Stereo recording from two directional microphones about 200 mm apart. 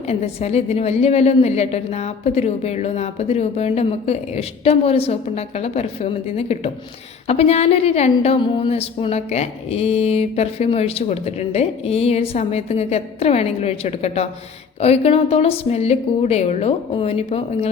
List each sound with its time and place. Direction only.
0.1 s a woman's voice: 30° left (ahead or behind)